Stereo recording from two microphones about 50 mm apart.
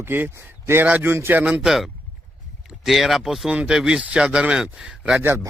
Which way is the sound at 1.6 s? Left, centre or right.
Centre.